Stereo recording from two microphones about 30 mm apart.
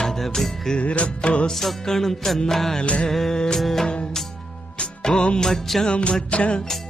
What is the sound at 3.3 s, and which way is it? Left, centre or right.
Music, left.